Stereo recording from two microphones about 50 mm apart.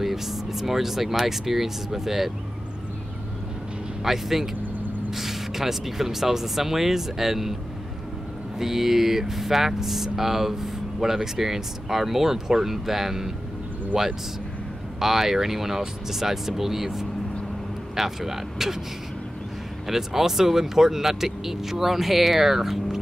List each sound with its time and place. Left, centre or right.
0.0 s speech: centre
4.0 s speech: centre
8.5 s speech: centre
19.9 s speech: centre